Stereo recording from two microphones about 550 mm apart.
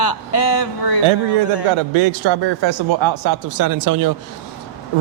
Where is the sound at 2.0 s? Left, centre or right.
Right.